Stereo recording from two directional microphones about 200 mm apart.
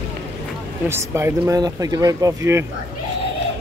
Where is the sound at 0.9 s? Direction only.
15° right (ahead or behind).